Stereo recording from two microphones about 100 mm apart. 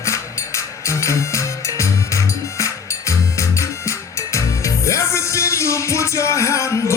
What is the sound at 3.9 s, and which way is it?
Music, 30° left (ahead or behind).